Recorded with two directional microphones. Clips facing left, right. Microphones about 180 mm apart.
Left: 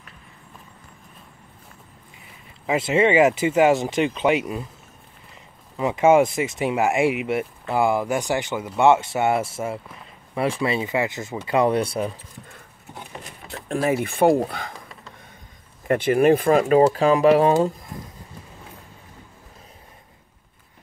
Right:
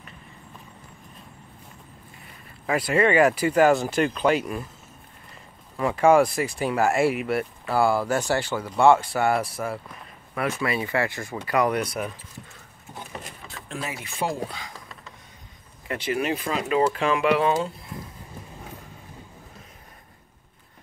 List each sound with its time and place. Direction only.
2.6 s speech: 20° left (ahead or behind)
5.8 s speech: 20° left (ahead or behind)
13.7 s speech: 50° left (ahead or behind)
15.9 s speech: 50° left (ahead or behind)